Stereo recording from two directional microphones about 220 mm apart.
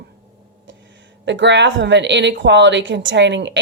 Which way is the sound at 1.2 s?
55° right (ahead or behind).